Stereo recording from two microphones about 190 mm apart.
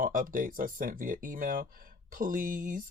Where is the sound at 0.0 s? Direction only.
45° right (ahead or behind).